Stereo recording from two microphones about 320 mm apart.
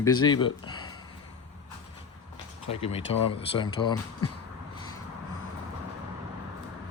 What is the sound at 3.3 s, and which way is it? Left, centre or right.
Speech, centre.